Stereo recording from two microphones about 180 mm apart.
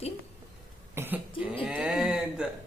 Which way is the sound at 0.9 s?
10° right (ahead or behind).